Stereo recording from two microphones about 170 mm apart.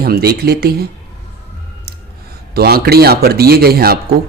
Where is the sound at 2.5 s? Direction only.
65° right (ahead or behind).